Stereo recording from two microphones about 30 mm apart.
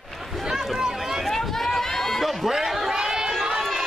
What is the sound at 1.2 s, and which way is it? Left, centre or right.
Run, centre.